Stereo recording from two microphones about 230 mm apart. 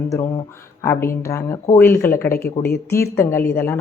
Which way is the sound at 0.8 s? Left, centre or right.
Centre.